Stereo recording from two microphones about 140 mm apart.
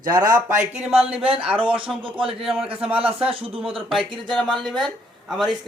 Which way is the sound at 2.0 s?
40° right (ahead or behind).